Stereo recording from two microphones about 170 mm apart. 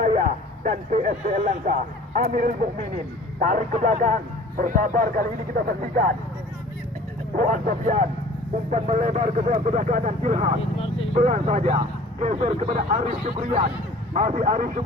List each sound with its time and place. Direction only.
0.0 s speech: 50° right (ahead or behind)
7.3 s speech: 50° right (ahead or behind)
10.8 s vehicle: 35° left (ahead or behind)
11.1 s speech: 45° right (ahead or behind)